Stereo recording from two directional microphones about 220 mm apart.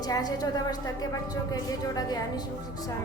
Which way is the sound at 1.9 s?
15° left (ahead or behind).